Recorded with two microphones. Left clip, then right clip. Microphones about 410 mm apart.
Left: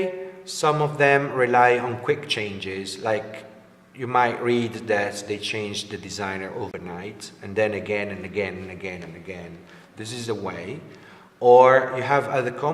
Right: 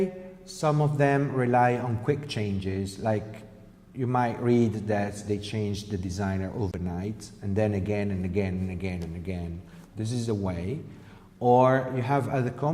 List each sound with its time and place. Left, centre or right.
0.0 s a man's voice: right
10.0 s a man's voice: right